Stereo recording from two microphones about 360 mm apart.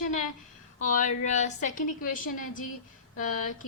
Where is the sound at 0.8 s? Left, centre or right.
Left.